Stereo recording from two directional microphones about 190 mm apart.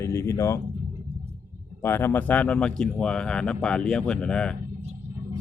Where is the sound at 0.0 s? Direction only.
15° left (ahead or behind).